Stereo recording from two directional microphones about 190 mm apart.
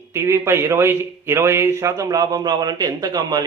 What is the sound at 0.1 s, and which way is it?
A man's voice, 15° right (ahead or behind).